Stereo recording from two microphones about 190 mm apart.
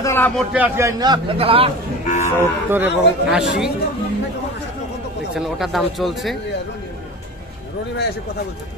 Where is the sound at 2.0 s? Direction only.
40° left (ahead or behind).